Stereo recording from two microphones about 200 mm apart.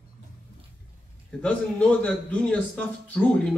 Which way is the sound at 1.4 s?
5° left (ahead or behind).